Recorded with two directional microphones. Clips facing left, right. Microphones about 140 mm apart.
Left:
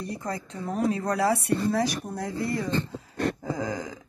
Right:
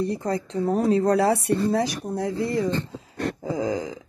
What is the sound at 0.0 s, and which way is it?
Speech, 30° right (ahead or behind).